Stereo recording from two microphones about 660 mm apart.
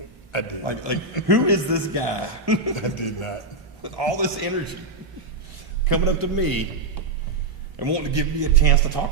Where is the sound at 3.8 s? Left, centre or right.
Right.